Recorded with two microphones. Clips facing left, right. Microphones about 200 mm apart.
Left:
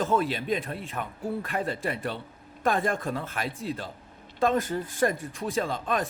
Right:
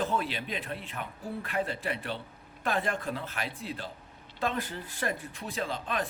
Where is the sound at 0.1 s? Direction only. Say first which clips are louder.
Left 7 dB; 45° left (ahead or behind).